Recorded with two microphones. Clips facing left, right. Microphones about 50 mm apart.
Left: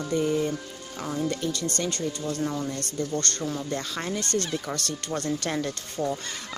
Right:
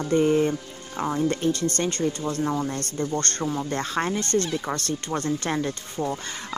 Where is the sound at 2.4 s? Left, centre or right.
Right.